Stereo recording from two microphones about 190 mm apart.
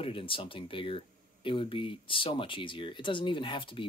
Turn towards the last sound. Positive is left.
turn(degrees=25)  # may be behind; listen again after turning